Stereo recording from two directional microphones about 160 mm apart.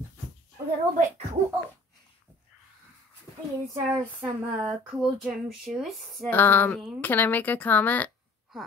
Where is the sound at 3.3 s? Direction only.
25° left (ahead or behind).